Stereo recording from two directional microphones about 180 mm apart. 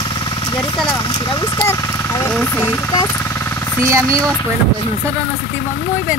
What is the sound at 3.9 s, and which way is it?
Speech, 20° right (ahead or behind).